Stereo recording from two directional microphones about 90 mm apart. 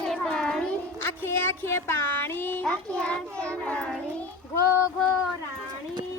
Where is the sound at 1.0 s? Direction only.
30° left (ahead or behind).